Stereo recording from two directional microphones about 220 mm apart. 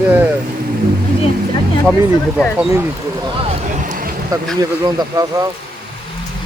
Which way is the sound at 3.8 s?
40° right (ahead or behind).